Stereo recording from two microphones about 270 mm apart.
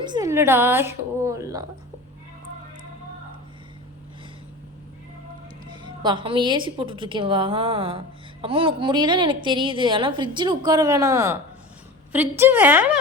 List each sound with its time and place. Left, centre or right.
0.0 s a woman's voice: centre
5.8 s a woman's voice: centre